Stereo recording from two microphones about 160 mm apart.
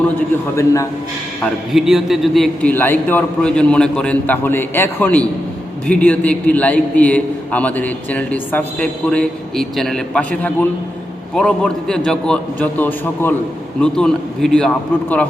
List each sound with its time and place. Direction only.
0.5 s a man's voice: 20° left (ahead or behind)
1.7 s a man's voice: centre (ahead or behind)